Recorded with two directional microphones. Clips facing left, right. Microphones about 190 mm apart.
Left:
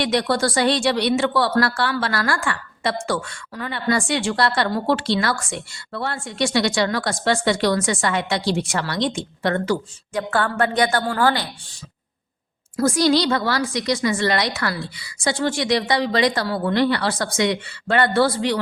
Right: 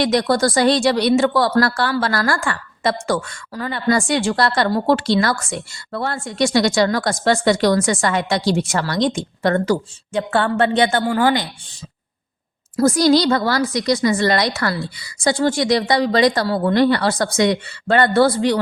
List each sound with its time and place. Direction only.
0.0 s a woman's voice: 40° right (ahead or behind)
10.1 s a woman's voice: 25° right (ahead or behind)
12.7 s a woman's voice: 40° right (ahead or behind)